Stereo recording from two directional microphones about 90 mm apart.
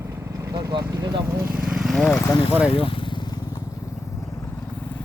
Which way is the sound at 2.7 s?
80° left.